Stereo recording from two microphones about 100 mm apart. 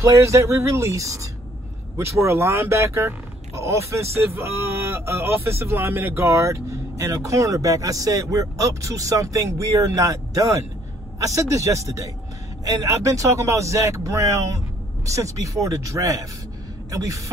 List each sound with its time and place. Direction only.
0.0 s speech: 30° right (ahead or behind)